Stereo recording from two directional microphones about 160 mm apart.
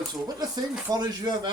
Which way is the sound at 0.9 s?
25° right (ahead or behind).